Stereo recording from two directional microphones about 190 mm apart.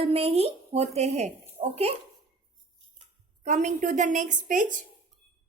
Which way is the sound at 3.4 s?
40° right (ahead or behind).